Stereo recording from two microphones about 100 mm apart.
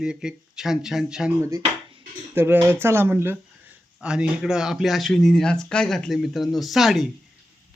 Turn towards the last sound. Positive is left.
turn(degrees=-5)  # may be behind; listen again after turning